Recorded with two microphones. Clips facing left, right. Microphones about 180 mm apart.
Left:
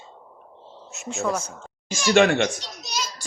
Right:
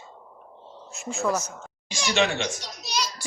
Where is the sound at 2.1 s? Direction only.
55° left (ahead or behind).